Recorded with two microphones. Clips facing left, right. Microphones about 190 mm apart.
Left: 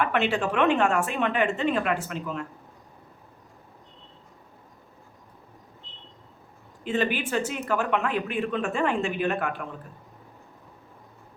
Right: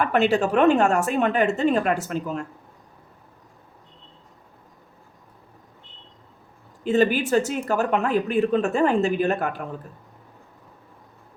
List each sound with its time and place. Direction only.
0.0 s speech: 40° right (ahead or behind)
6.8 s speech: 40° right (ahead or behind)